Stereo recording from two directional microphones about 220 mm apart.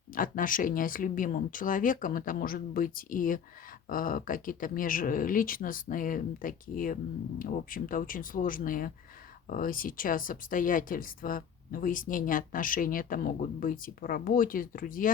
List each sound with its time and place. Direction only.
0.1 s speech: 40° left (ahead or behind)